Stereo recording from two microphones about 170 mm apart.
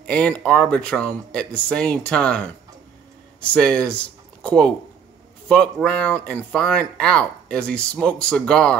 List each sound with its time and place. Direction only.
0.0 s speech: 5° left (ahead or behind)